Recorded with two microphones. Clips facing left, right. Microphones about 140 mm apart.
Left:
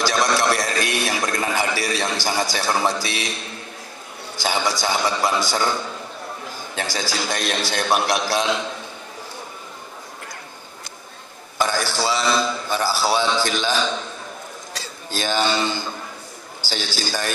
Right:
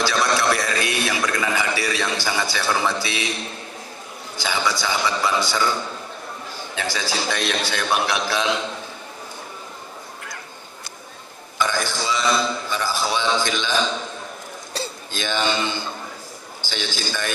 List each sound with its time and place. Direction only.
0.0 s a sound: 40° left (ahead or behind)
2.2 s a man's voice: 40° left (ahead or behind)
4.4 s a man's voice: 40° left (ahead or behind)
6.8 s a man's voice: 40° left (ahead or behind)
11.5 s a man's voice: 40° left (ahead or behind)
15.0 s a man's voice: 35° left (ahead or behind)